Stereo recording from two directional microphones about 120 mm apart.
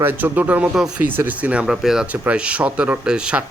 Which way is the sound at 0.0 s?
15° right (ahead or behind).